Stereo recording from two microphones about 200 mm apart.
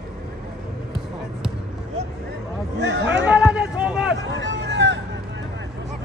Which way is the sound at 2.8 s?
60° right (ahead or behind).